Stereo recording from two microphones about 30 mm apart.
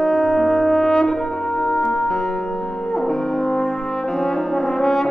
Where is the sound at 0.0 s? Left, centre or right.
Centre.